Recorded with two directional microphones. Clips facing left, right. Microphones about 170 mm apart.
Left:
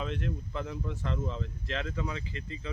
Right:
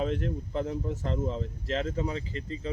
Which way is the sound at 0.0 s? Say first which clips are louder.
Right 5 dB; 40° right (ahead or behind).